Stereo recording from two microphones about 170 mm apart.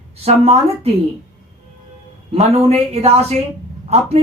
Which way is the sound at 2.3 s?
40° right (ahead or behind).